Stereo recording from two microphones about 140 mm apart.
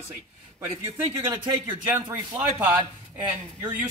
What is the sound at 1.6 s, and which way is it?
A woman's voice, 15° right (ahead or behind).